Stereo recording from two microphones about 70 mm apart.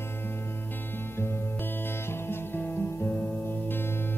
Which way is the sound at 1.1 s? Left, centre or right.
Left.